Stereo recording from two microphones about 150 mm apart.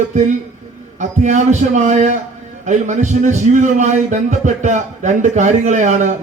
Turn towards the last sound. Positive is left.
turn(degrees=-55)  # may be behind; listen again after turning